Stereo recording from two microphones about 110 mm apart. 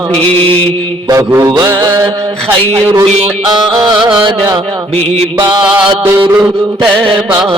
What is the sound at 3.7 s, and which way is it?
Music, 40° right (ahead or behind).